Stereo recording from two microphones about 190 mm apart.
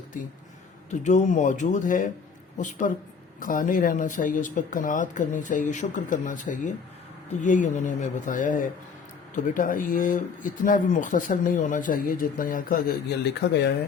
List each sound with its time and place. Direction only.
0.9 s speech: 40° left (ahead or behind); by 13.7 s 60° left (ahead or behind)